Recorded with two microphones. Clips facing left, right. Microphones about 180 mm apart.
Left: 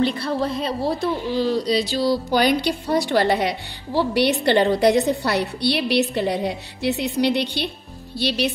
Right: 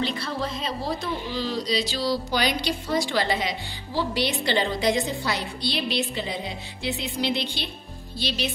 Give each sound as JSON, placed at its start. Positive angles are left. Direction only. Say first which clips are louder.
{"t": 0.2, "sound": "a woman's voice", "louder": "left 6 dB", "side_deg": 60}